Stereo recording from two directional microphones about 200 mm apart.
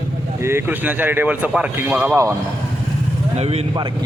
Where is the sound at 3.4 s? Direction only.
30° right (ahead or behind).